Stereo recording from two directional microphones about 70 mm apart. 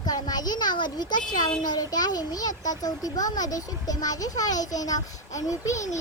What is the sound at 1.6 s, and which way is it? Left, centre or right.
A child's voice, left.